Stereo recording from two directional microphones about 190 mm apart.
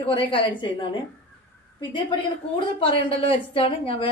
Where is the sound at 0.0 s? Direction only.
25° left (ahead or behind).